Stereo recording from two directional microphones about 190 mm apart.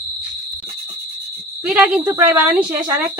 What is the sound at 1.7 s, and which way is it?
Speech, 5° right (ahead or behind).